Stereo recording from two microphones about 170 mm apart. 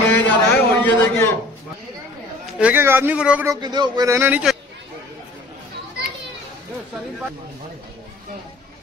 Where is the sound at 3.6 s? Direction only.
25° right (ahead or behind); by 4.6 s 5° right (ahead or behind).